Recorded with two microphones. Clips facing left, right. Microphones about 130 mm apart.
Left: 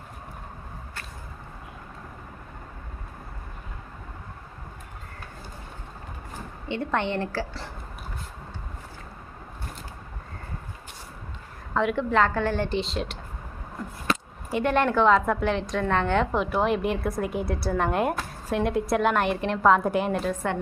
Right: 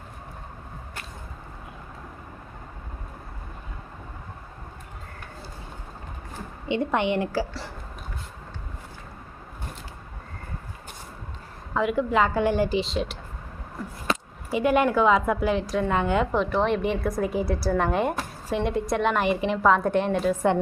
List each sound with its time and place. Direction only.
6.7 s a woman's voice: 15° right (ahead or behind)
11.7 s a woman's voice: 5° right (ahead or behind)
14.5 s a woman's voice: 5° right (ahead or behind)
20.3 s a woman's voice: 15° right (ahead or behind)